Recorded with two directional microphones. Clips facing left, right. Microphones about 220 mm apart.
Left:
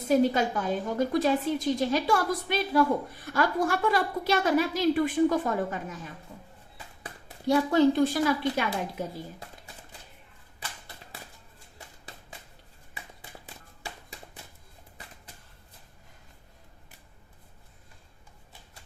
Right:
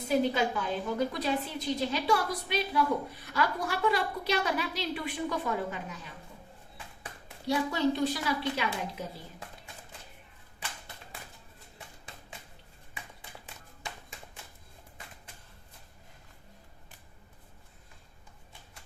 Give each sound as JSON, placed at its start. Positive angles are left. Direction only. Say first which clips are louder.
{"t": 0.1, "sound": "a woman's voice", "louder": "left 4 dB", "side_deg": 45}
{"t": 7.0, "sound": "a woman's voice", "louder": "left 7 dB", "side_deg": 50}
{"t": 13.4, "sound": "a sound", "louder": "left 1 dB", "side_deg": 35}